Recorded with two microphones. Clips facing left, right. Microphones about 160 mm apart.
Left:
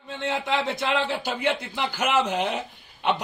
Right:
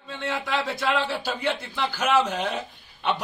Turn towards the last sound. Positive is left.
turn(degrees=10)  # may be behind; listen again after turning